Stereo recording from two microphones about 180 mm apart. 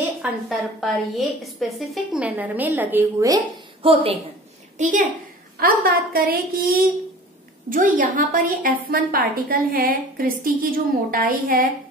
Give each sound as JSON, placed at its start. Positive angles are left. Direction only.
{"t": 0.2, "sound": "a woman's voice", "side_deg": -5}
{"t": 3.8, "sound": "a woman's voice", "side_deg": -30}
{"t": 4.7, "sound": "a woman's voice", "side_deg": -45}
{"t": 5.6, "sound": "a woman's voice", "side_deg": -55}